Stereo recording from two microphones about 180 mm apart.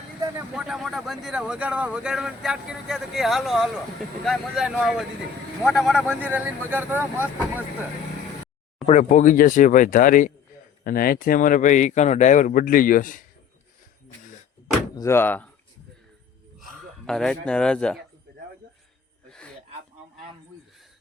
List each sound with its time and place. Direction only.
0.5 s speech: 5° right (ahead or behind)
8.9 s speech: 45° left (ahead or behind)
14.9 s speech: 15° left (ahead or behind)
17.1 s speech: 5° left (ahead or behind)
19.3 s a sound: 5° left (ahead or behind)